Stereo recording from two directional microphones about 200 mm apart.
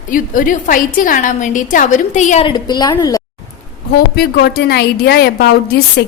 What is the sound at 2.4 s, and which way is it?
Speech, 20° left (ahead or behind).